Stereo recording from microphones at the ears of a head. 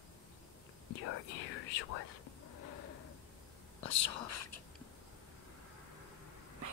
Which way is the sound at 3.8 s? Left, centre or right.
Left.